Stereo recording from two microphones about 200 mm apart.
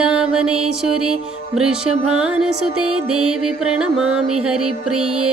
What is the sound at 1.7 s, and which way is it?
Music, 90° right.